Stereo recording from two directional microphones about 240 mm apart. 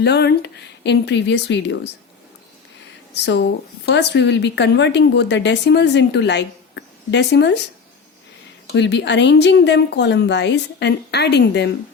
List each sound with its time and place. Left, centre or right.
0.0 s a woman's voice: left
3.2 s a woman's voice: left
8.7 s a woman's voice: left